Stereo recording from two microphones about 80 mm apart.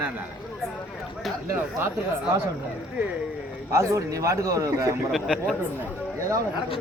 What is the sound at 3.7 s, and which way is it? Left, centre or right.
A man's voice, right.